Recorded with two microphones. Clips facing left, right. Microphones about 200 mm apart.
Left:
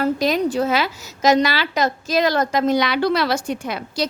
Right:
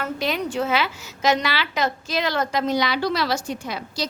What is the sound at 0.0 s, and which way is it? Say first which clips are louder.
A woman's voice: left 7 dB; 40° left (ahead or behind).